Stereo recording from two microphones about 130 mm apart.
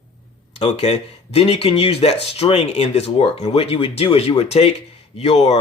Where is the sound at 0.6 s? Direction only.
50° left (ahead or behind).